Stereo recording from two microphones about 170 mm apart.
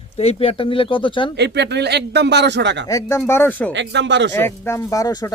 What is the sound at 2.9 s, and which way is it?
Speech, 20° left (ahead or behind).